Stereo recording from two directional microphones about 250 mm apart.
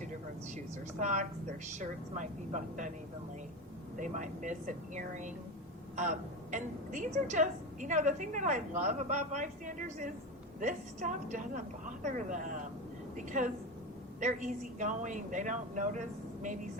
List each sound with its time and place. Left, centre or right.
0.5 s a woman's voice: right
3.9 s a woman's voice: right